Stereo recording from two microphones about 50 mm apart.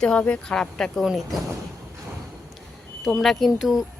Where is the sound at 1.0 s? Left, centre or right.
Centre.